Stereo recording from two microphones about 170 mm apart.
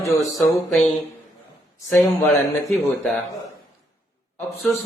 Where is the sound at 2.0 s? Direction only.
Centre (ahead or behind).